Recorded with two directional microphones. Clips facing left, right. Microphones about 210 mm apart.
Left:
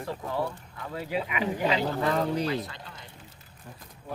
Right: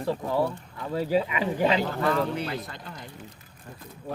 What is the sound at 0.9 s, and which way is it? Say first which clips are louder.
Speech: right 6 dB; 35° right (ahead or behind).